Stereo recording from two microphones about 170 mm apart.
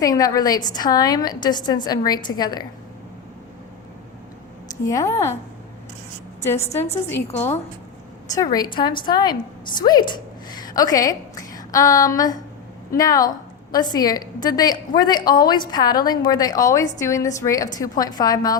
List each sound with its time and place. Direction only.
0.0 s a woman's voice: 20° left (ahead or behind)
4.9 s a woman's voice: 15° left (ahead or behind)
6.9 s a woman's voice: 10° left (ahead or behind)